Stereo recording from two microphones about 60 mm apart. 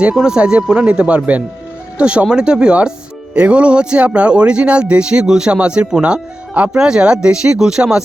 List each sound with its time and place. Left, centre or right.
0.0 s speech: centre